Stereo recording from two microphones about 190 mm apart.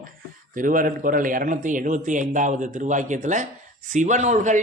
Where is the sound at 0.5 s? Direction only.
45° right (ahead or behind).